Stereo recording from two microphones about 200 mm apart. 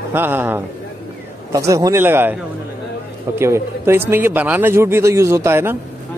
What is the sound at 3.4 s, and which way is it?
Speech, 15° right (ahead or behind).